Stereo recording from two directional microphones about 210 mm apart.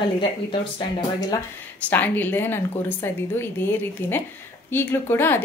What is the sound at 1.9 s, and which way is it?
A woman's voice, 10° left (ahead or behind).